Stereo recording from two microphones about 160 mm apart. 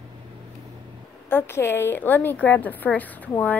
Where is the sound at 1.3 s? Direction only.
15° left (ahead or behind).